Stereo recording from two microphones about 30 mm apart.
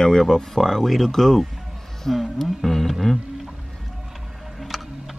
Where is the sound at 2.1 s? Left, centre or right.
Centre.